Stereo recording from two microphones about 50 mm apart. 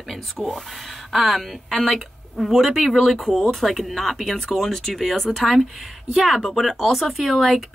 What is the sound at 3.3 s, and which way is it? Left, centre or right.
Speech, centre.